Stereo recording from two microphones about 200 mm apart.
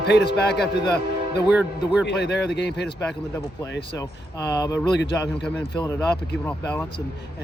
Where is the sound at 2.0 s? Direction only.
55° left (ahead or behind).